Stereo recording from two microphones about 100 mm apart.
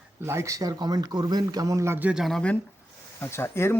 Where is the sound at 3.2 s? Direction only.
25° left (ahead or behind).